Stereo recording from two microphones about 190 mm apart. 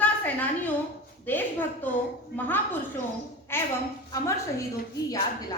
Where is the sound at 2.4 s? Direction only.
10° left (ahead or behind).